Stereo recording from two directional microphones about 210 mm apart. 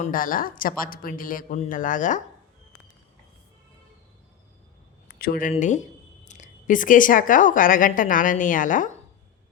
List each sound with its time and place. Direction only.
0.0 s a woman's voice: 40° left (ahead or behind)
5.0 s a woman's voice: 45° left (ahead or behind)